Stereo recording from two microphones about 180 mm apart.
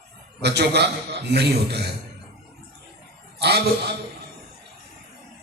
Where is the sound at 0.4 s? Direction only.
70° right (ahead or behind).